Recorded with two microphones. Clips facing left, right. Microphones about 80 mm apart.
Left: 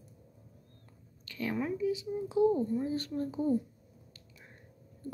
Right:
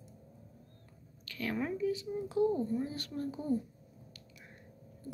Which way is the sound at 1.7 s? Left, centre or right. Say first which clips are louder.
Left 2 dB; centre.